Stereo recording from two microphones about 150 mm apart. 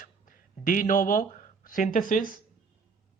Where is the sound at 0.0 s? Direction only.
65° left (ahead or behind).